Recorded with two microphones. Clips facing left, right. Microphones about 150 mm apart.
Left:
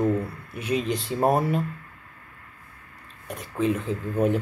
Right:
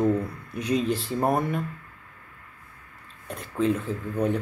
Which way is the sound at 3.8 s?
20° left (ahead or behind).